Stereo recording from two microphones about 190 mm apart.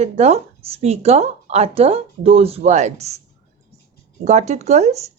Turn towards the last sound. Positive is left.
turn(degrees=-35)  # may be behind; listen again after turning